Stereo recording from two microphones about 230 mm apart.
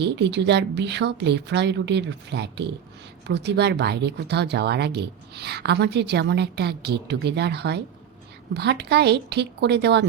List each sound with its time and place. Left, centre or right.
0.0 s speech: right